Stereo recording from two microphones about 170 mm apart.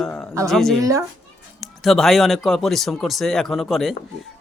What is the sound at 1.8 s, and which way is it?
Speech, centre (ahead or behind).